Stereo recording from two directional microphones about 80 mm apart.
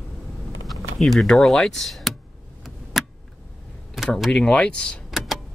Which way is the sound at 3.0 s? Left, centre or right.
Centre.